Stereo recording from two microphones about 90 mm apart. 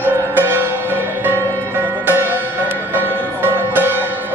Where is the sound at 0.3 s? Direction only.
25° right (ahead or behind).